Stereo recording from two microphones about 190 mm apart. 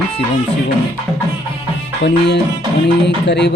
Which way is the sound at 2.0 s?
60° left (ahead or behind).